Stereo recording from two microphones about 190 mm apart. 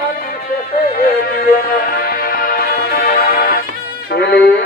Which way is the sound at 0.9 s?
50° left (ahead or behind).